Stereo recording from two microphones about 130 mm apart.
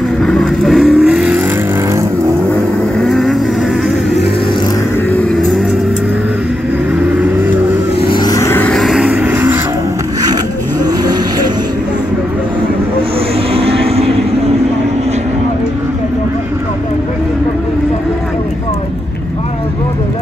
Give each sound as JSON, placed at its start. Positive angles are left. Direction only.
{"t": 0.2, "sound": "vehicle", "side_deg": 5}
{"t": 3.0, "sound": "vehicle", "side_deg": 0}
{"t": 5.1, "sound": "vehicle", "side_deg": 5}
{"t": 8.1, "sound": "vehicle", "side_deg": 30}
{"t": 8.7, "sound": "vehicle", "side_deg": 0}
{"t": 13.5, "sound": "vehicle", "side_deg": -50}